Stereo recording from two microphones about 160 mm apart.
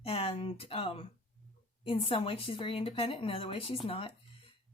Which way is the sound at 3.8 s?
35° left (ahead or behind).